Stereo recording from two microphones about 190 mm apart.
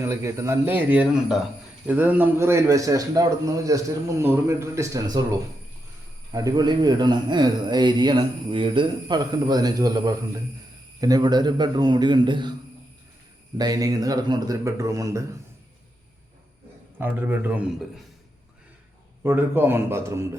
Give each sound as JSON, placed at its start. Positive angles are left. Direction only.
{"t": 0.0, "sound": "a man's voice", "side_deg": -15}
{"t": 6.3, "sound": "a man's voice", "side_deg": -20}
{"t": 13.6, "sound": "a man's voice", "side_deg": -20}
{"t": 17.0, "sound": "a man's voice", "side_deg": -10}
{"t": 19.2, "sound": "a man's voice", "side_deg": -10}